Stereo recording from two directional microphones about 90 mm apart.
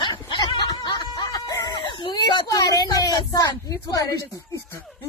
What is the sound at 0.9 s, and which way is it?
Music, 55° left (ahead or behind).